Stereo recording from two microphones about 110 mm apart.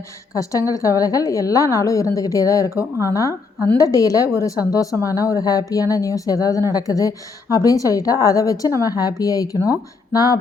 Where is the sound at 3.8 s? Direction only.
30° left (ahead or behind).